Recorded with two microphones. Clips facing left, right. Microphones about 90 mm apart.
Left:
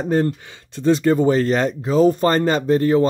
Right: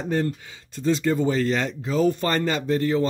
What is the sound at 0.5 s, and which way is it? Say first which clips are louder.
Speech: left 6 dB; 55° left (ahead or behind).